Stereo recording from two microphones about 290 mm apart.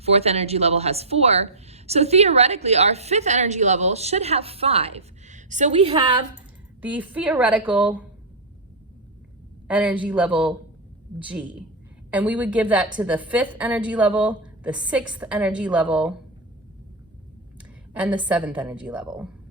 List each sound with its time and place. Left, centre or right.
0.0 s speech: right
6.8 s a woman's voice: centre
9.6 s a woman's voice: centre
17.9 s a woman's voice: centre